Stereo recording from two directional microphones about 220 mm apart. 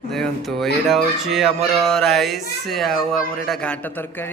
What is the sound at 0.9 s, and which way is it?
A man's voice, centre (ahead or behind).